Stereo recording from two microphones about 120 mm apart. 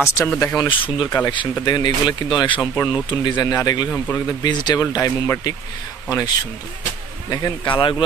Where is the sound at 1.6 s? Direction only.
35° left (ahead or behind).